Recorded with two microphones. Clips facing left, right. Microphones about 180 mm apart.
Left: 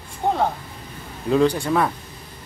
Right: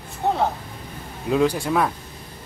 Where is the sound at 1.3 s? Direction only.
5° right (ahead or behind).